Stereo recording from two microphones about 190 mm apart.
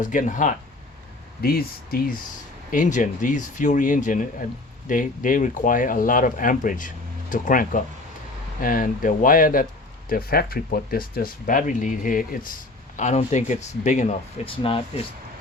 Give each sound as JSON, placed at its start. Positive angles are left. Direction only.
{"t": 0.0, "sound": "speech", "side_deg": 40}
{"t": 1.4, "sound": "speech", "side_deg": 50}